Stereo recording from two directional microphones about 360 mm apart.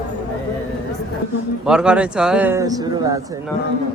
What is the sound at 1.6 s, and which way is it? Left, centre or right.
Speech, centre.